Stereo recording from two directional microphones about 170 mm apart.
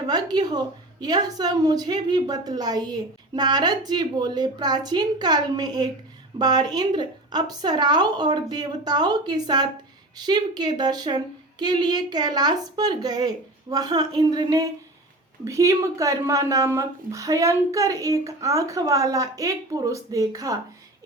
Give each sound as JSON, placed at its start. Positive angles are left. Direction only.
{"t": 0.1, "sound": "a woman's voice", "side_deg": -25}